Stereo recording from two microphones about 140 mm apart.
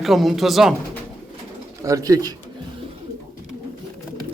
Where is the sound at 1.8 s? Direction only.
25° right (ahead or behind).